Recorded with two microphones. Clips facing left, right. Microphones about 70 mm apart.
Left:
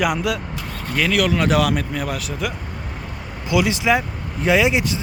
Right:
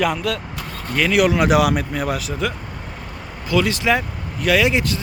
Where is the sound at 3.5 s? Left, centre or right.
Centre.